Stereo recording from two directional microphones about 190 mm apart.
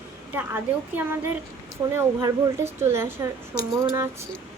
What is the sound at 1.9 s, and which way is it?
Speech, 20° right (ahead or behind).